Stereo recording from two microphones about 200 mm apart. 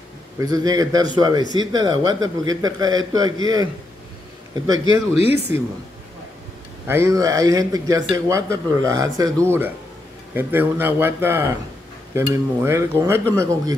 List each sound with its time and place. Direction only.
0.4 s speech: 20° right (ahead or behind)
5.1 s speech: 30° left (ahead or behind)
6.9 s a man's voice: 15° right (ahead or behind)